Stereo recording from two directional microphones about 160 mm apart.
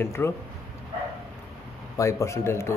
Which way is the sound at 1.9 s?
20° left (ahead or behind).